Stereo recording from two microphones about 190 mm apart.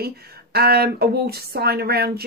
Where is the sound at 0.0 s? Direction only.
55° right (ahead or behind).